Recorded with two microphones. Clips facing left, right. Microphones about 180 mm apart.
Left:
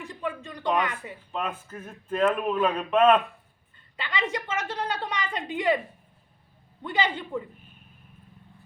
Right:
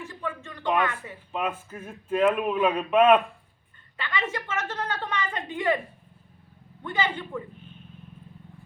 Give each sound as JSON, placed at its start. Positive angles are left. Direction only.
{"t": 0.0, "sound": "a sound", "side_deg": 15}
{"t": 0.8, "sound": "a woman's voice", "side_deg": 15}
{"t": 1.3, "sound": "a man's voice", "side_deg": -10}
{"t": 3.9, "sound": "a woman's voice", "side_deg": 15}
{"t": 6.8, "sound": "speech", "side_deg": 15}